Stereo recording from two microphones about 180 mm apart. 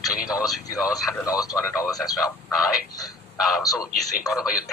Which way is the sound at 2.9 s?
20° left (ahead or behind).